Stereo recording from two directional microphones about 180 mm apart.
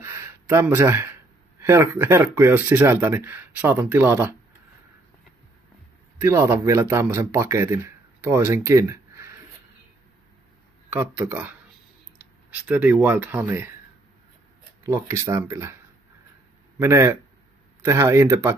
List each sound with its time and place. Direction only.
0.0 s a sound: 15° right (ahead or behind)
1.6 s speech: 15° right (ahead or behind)
6.2 s a man's voice: 15° right (ahead or behind)
10.9 s speech: 10° right (ahead or behind)
14.8 s speech: 15° right (ahead or behind)
16.7 s speech: 15° right (ahead or behind)